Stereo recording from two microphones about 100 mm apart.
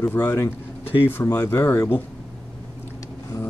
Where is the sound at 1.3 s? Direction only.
35° left (ahead or behind).